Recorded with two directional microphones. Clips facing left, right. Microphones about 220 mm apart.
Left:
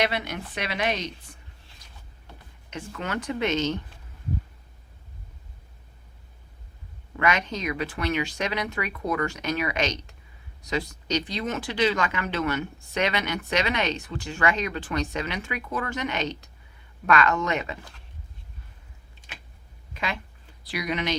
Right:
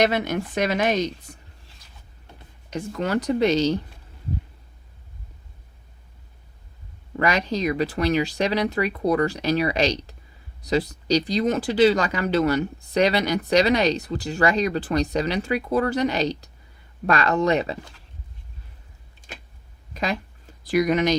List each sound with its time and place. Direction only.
0.0 s speech: 45° right (ahead or behind)
2.6 s speech: 35° right (ahead or behind)
7.2 s speech: 35° right (ahead or behind)
19.9 s a sound: 40° right (ahead or behind)